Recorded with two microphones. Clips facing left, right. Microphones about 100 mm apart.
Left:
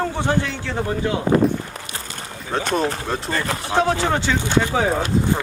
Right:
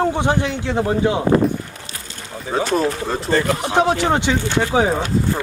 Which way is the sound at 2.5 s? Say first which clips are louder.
Right 3 dB; 5° right (ahead or behind).